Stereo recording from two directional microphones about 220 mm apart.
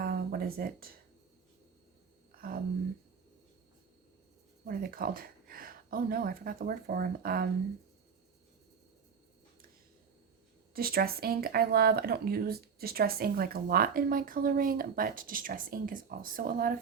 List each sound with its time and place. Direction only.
0.0 s a sound: 45° right (ahead or behind)
4.6 s speech: 40° right (ahead or behind)
10.8 s speech: 45° right (ahead or behind)